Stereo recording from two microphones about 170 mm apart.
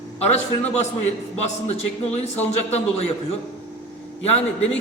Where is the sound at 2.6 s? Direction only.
40° left (ahead or behind).